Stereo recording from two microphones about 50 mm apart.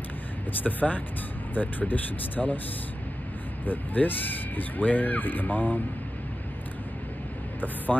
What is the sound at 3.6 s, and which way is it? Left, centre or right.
Speech, left.